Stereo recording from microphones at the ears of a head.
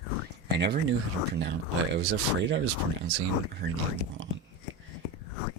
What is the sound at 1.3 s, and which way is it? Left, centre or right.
Speech, right.